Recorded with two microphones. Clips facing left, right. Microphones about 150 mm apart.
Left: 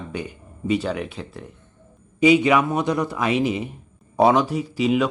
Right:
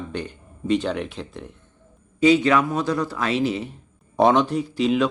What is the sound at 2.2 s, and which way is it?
Speech, 15° left (ahead or behind).